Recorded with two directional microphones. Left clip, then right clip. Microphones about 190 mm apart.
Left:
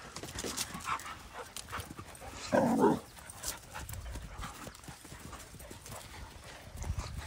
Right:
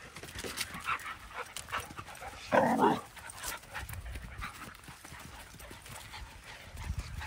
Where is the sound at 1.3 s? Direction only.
5° left (ahead or behind).